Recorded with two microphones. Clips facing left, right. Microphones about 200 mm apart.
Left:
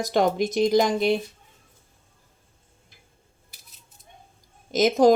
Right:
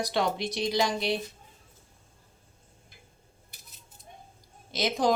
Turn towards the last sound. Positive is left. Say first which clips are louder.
# left 9 dB
turn(degrees=45)  # may be behind; listen again after turning